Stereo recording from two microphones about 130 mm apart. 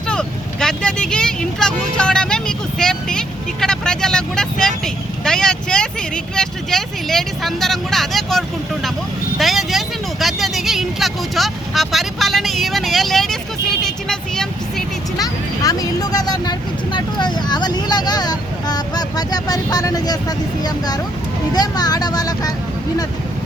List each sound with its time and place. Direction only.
0.1 s speech: 5° left (ahead or behind)
15.2 s speech: 30° left (ahead or behind)